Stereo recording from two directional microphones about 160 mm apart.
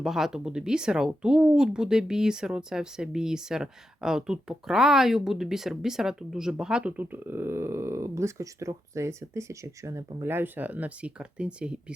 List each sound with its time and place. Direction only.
0.0 s speech: 5° right (ahead or behind)